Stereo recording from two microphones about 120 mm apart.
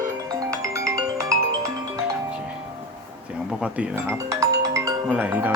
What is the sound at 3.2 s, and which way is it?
Music, 10° right (ahead or behind).